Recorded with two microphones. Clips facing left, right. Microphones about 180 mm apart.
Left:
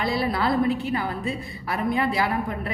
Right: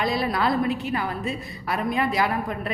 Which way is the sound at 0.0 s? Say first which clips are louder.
Even; 20° right (ahead or behind).